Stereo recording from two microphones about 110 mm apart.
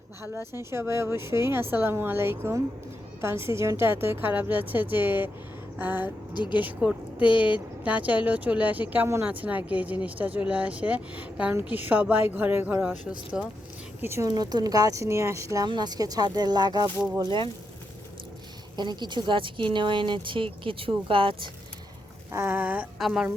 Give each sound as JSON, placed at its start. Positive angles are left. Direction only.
{"t": 0.2, "sound": "a woman's voice", "side_deg": -20}
{"t": 6.3, "sound": "speech", "side_deg": 40}
{"t": 6.6, "sound": "speech", "side_deg": -15}
{"t": 14.0, "sound": "a woman's voice", "side_deg": -25}
{"t": 14.3, "sound": "speech", "side_deg": -40}
{"t": 15.6, "sound": "speech", "side_deg": -40}
{"t": 18.8, "sound": "speech", "side_deg": -40}
{"t": 22.3, "sound": "speech", "side_deg": -20}
{"t": 23.0, "sound": "a woman's voice", "side_deg": 0}